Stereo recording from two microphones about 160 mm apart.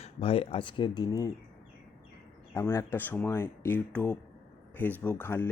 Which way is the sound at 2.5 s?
20° left (ahead or behind).